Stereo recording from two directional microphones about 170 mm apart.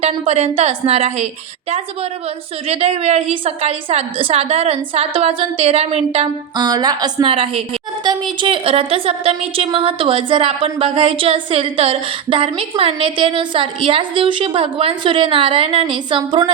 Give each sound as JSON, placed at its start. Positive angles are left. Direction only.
{"t": 0.0, "sound": "a woman's voice", "side_deg": -40}
{"t": 2.6, "sound": "a woman's voice", "side_deg": -35}
{"t": 6.6, "sound": "a woman's voice", "side_deg": -20}